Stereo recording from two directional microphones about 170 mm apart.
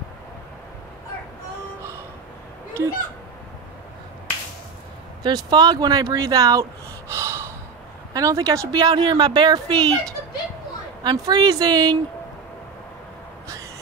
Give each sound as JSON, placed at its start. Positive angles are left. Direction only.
{"t": 2.8, "sound": "speech", "side_deg": -15}
{"t": 5.2, "sound": "speech", "side_deg": -25}
{"t": 7.1, "sound": "gasp", "side_deg": -15}
{"t": 8.1, "sound": "speech", "side_deg": -20}